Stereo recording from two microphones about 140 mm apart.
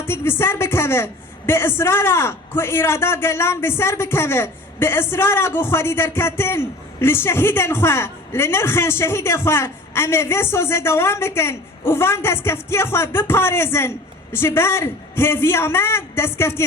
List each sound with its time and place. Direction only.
0.0 s a woman's voice: 15° left (ahead or behind)